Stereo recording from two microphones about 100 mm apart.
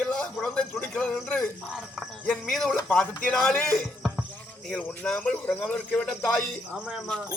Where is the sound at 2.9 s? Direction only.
10° left (ahead or behind).